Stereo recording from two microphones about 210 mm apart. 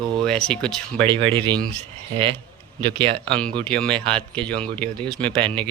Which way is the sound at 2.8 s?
25° right (ahead or behind).